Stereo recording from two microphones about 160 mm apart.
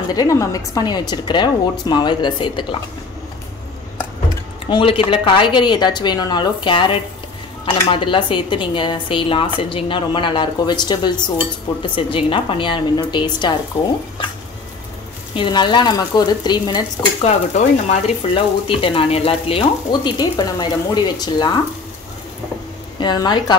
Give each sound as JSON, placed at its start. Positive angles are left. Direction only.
{"t": 0.1, "sound": "a woman's voice", "side_deg": 20}
{"t": 4.6, "sound": "a woman's voice", "side_deg": 30}
{"t": 15.3, "sound": "a woman's voice", "side_deg": 30}
{"t": 17.2, "sound": "speech", "side_deg": 40}
{"t": 22.9, "sound": "a woman's voice", "side_deg": 25}